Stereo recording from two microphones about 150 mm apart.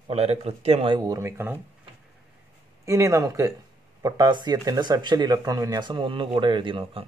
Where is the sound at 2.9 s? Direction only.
20° right (ahead or behind).